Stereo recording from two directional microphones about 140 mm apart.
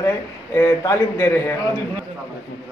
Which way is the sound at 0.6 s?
20° left (ahead or behind).